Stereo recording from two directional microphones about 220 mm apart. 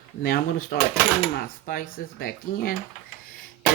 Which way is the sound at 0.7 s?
45° left (ahead or behind).